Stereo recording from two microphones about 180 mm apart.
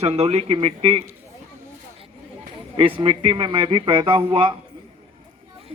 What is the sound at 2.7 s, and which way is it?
Speech, 30° right (ahead or behind).